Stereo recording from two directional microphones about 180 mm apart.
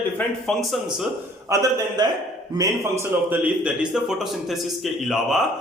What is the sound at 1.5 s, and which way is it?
A man's voice, 20° right (ahead or behind).